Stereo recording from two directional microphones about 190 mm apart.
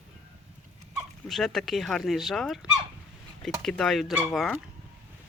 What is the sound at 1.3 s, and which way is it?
Speech, centre (ahead or behind).